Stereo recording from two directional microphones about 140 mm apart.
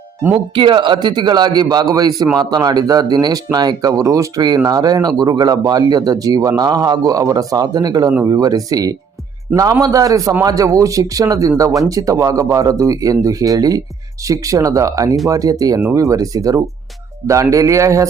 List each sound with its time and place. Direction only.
0.5 s speech: 35° right (ahead or behind)